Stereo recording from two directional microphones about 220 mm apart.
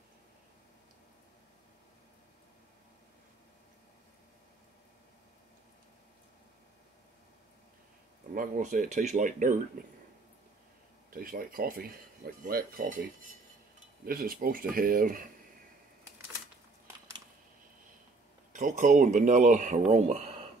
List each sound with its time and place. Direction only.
8.4 s speech: 40° right (ahead or behind)
11.1 s speech: 40° right (ahead or behind)
14.0 s speech: 40° right (ahead or behind)
18.5 s speech: 35° right (ahead or behind)